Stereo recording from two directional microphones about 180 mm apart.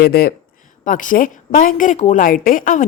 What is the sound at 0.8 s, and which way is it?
A woman's voice, 45° left (ahead or behind).